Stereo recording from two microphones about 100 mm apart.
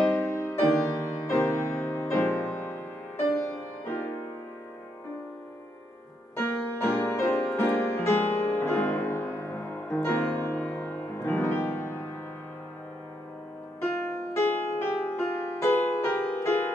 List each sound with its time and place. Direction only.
0.1 s music: 20° left (ahead or behind)
6.3 s music: 25° left (ahead or behind)
13.7 s music: 25° left (ahead or behind)